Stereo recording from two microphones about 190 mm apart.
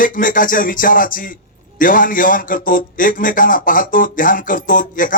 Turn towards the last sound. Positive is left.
turn(degrees=45)  # may be behind; listen again after turning